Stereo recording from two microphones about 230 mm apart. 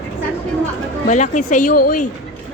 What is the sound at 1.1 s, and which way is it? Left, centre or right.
Speech, left.